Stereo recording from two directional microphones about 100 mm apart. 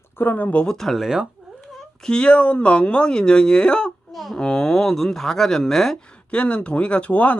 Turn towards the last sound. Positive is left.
turn(degrees=15)  # may be behind; listen again after turning